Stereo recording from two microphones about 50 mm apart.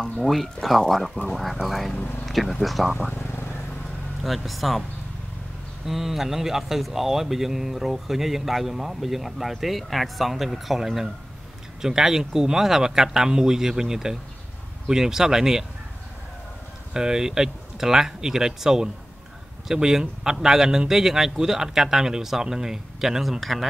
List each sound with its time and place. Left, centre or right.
0.2 s speech: centre
2.0 s speech: left
2.2 s speech: centre
3.2 s vehicle: left
4.2 s speech: centre
5.9 s speech: centre
16.9 s speech: centre